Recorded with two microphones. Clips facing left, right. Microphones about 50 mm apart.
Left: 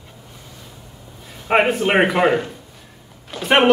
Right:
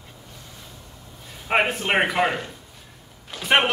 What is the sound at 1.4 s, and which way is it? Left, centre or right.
Speech, centre.